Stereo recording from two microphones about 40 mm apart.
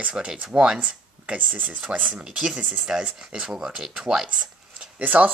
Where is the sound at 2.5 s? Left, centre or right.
Right.